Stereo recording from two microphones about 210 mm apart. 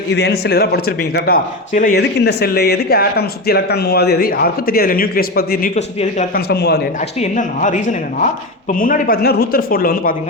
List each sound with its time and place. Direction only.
0.1 s speech: 55° left (ahead or behind)
2.0 s speech: 50° left (ahead or behind)
5.7 s speech: 30° left (ahead or behind)
6.3 s speech: 50° left (ahead or behind)
7.2 s speech: 35° left (ahead or behind)
8.8 s speech: 40° left (ahead or behind)